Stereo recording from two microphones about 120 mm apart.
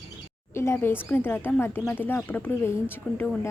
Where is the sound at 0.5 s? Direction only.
20° left (ahead or behind).